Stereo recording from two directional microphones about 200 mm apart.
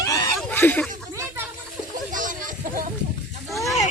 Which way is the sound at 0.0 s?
15° left (ahead or behind).